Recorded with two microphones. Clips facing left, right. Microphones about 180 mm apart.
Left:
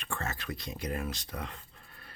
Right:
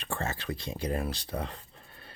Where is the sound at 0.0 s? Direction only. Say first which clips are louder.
Right 3 dB; 30° right (ahead or behind).